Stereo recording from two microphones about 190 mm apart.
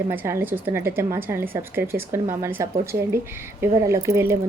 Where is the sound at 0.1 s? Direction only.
10° right (ahead or behind).